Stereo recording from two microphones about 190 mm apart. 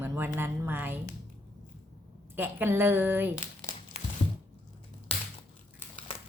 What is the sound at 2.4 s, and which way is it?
Speech, 10° right (ahead or behind).